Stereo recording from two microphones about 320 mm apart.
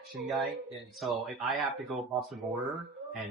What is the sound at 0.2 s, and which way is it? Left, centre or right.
Speech, centre.